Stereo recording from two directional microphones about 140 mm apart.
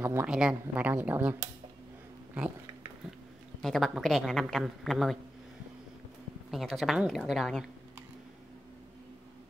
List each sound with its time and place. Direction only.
0.0 s speech: 15° right (ahead or behind)
3.6 s a woman's voice: centre (ahead or behind)
6.5 s a woman's voice: centre (ahead or behind)